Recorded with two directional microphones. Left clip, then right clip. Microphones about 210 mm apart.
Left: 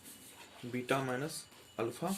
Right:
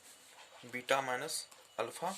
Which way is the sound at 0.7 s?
30° right (ahead or behind).